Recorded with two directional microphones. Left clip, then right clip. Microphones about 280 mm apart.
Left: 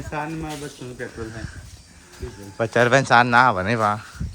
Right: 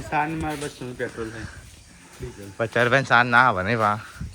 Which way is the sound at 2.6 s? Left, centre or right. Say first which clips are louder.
Left 3 dB; centre.